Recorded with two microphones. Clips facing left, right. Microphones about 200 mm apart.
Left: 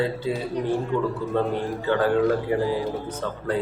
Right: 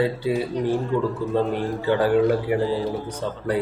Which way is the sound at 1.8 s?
10° right (ahead or behind).